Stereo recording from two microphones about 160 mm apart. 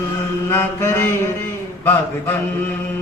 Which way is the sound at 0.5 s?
15° left (ahead or behind).